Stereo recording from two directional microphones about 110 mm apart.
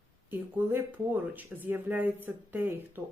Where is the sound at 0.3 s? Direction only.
15° right (ahead or behind).